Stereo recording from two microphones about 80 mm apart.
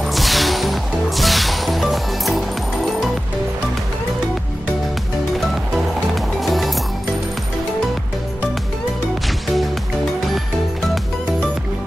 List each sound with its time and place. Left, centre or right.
0.0 s music: centre
6.1 s music: centre